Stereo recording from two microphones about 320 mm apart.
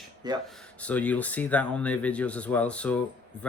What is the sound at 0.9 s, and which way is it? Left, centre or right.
Speech, centre.